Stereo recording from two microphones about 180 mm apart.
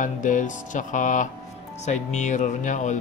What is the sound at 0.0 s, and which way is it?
Speech, 45° left (ahead or behind).